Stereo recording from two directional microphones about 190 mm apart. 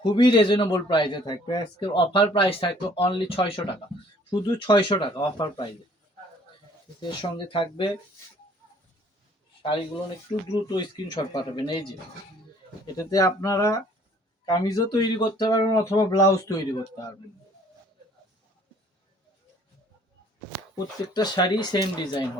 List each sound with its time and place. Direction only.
0.0 s a man's voice: 25° left (ahead or behind)
7.0 s a man's voice: 25° left (ahead or behind)
10.5 s a man's voice: 20° left (ahead or behind)
13.0 s a man's voice: 20° left (ahead or behind)
20.7 s a man's voice: 20° left (ahead or behind)